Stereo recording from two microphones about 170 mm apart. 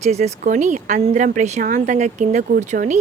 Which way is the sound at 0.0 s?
40° right (ahead or behind).